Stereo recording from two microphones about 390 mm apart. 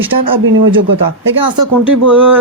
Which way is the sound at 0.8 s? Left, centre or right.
Right.